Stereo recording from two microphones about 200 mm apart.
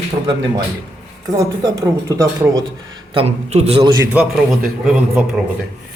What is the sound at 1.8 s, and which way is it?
Speech, 15° right (ahead or behind).